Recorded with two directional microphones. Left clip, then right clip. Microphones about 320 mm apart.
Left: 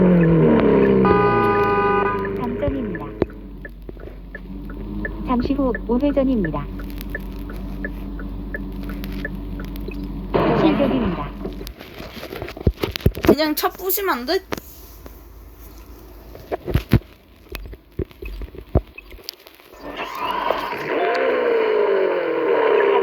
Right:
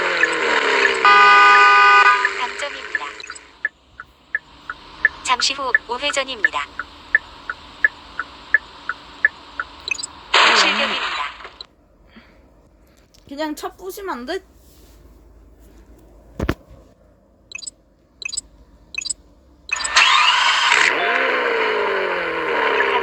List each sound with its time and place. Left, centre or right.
0.0 s vehicle: right
4.3 s a sound: right
6.3 s fowl: right
9.2 s a sound: right
13.3 s speech: centre
19.8 s vehicle: right